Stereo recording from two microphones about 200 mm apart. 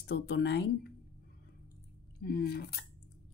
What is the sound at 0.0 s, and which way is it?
Speech, 60° left (ahead or behind).